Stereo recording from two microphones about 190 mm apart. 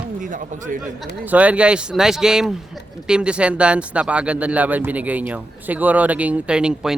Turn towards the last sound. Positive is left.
turn(degrees=-5)  # may be behind; listen again after turning